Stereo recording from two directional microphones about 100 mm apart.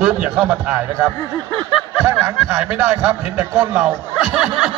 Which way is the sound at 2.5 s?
10° right (ahead or behind).